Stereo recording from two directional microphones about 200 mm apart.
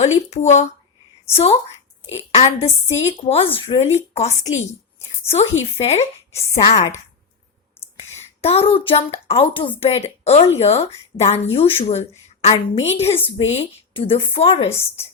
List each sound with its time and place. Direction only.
0.2 s a woman's voice: 35° left (ahead or behind)